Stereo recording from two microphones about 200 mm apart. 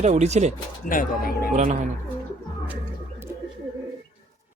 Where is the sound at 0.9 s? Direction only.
45° left (ahead or behind).